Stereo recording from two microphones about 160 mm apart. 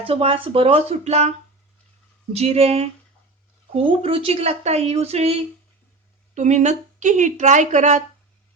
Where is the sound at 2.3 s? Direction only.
40° right (ahead or behind).